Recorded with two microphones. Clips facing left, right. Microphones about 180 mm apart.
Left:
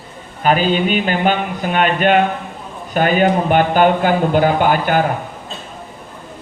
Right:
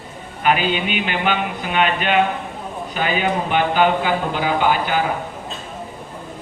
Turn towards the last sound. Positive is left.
turn(degrees=50)  # may be behind; listen again after turning